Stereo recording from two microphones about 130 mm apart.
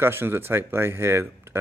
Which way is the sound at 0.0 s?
20° right (ahead or behind).